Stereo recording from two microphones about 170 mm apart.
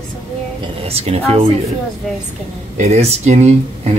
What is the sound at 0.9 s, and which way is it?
Speech, 35° right (ahead or behind).